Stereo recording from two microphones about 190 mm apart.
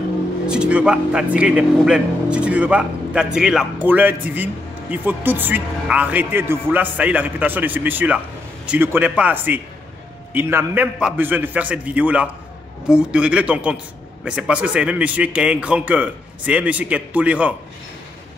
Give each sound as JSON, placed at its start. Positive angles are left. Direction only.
{"t": 0.5, "sound": "a man's voice", "side_deg": -5}